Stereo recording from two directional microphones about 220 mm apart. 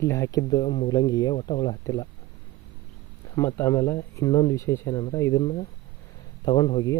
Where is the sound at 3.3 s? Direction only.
15° left (ahead or behind).